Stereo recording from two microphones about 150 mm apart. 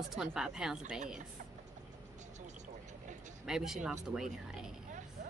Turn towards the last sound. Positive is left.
turn(degrees=-5)  # may be behind; listen again after turning